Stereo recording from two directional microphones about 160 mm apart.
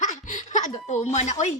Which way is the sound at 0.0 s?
50° left (ahead or behind).